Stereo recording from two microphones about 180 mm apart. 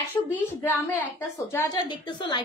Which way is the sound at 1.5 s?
20° left (ahead or behind).